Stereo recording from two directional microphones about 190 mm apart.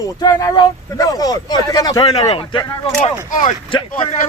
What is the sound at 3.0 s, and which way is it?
Speech, 40° left (ahead or behind).